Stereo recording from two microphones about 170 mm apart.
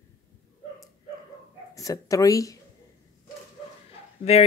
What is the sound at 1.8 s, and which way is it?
Speech, 20° left (ahead or behind).